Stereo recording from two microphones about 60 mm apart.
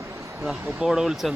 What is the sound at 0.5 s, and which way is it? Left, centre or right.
Speech, right.